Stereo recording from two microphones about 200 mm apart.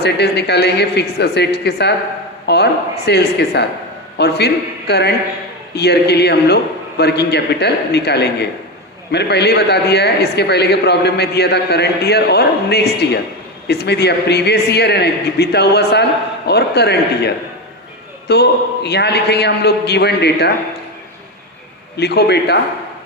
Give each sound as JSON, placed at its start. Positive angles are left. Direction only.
{"t": 0.0, "sound": "a man's voice", "side_deg": 55}
{"t": 21.9, "sound": "a man's voice", "side_deg": 55}